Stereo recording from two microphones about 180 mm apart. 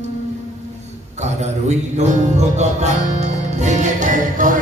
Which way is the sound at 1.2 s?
40° right (ahead or behind).